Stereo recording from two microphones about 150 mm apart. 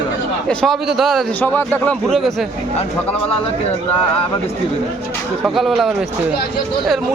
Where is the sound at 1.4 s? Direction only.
10° left (ahead or behind).